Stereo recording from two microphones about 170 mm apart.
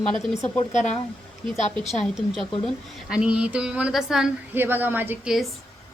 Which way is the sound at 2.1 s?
5° right (ahead or behind).